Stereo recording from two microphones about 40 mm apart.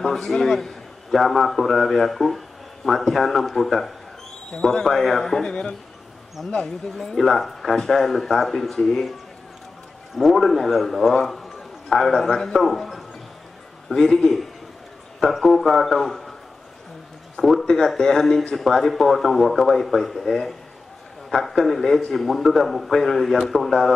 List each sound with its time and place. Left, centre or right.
0.0 s a man's voice: centre
5.5 s speech: left
6.4 s a man's voice: centre
10.1 s a man's voice: centre
11.4 s a sound: centre
12.3 s speech: centre
12.5 s a man's voice: centre
17.4 s a man's voice: centre